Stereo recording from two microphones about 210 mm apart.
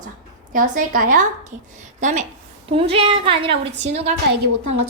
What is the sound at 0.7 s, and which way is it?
A woman's voice, 40° right (ahead or behind).